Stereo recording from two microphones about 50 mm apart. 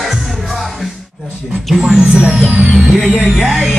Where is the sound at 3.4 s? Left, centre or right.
Centre.